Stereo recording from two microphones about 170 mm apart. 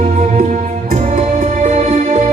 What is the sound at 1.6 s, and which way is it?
Music, 40° right (ahead or behind).